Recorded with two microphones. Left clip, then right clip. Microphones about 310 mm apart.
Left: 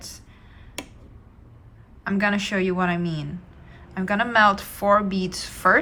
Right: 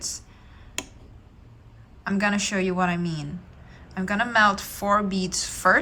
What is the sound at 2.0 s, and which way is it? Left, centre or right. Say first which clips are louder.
A woman's voice: left 1 dB; centre.